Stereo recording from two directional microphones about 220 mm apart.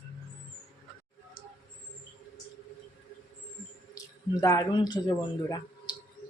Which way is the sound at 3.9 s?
15° left (ahead or behind).